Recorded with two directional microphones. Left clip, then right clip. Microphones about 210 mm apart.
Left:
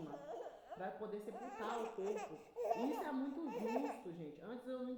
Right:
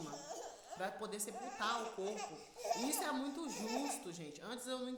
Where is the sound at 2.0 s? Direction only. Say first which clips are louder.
Even; 45° left (ahead or behind).